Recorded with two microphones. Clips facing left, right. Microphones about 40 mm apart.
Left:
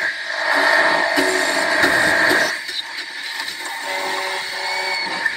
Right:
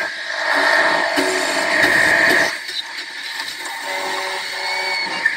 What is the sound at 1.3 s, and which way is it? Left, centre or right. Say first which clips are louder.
Music: left 1 dB; centre.